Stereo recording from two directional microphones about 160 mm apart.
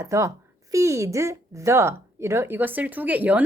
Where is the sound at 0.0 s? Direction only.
20° right (ahead or behind).